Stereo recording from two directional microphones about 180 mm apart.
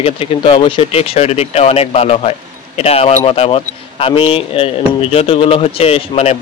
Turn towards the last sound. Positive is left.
turn(degrees=35)  # may be behind; listen again after turning